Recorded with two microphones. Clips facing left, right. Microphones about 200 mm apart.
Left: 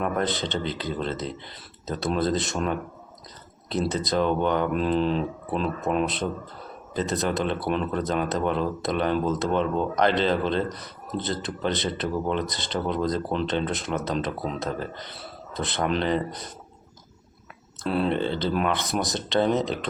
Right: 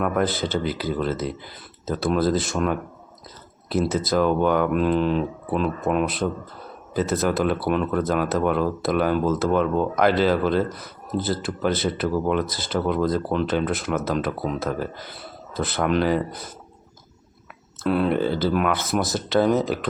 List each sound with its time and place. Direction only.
0.0 s speech: 5° right (ahead or behind)
17.8 s speech: 5° right (ahead or behind)